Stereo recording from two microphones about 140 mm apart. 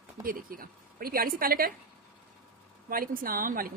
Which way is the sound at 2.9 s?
90° right.